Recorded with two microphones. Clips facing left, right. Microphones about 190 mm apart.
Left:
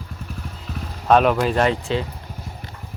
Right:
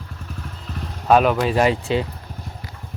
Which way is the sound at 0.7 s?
Centre (ahead or behind).